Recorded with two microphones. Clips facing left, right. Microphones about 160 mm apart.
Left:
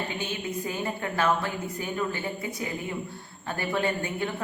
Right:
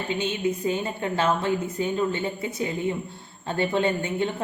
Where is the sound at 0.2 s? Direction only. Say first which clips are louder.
Right 6 dB; 20° right (ahead or behind).